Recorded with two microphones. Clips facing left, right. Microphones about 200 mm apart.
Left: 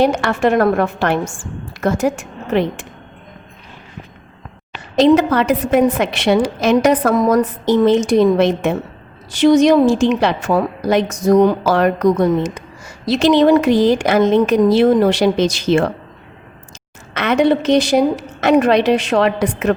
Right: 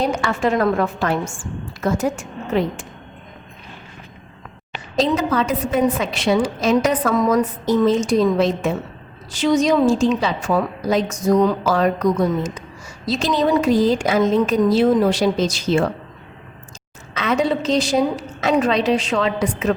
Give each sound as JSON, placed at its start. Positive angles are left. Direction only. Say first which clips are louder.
{"t": 0.0, "sound": "a woman's voice", "louder": "left 5 dB", "side_deg": 70}
{"t": 4.9, "sound": "a woman's voice", "louder": "left 7 dB", "side_deg": 70}
{"t": 9.8, "sound": "a woman's voice", "louder": "left 3 dB", "side_deg": 70}
{"t": 17.2, "sound": "a woman's voice", "louder": "left 5 dB", "side_deg": 70}